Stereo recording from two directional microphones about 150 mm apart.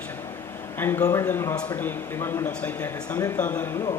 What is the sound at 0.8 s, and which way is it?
Speech, 15° left (ahead or behind).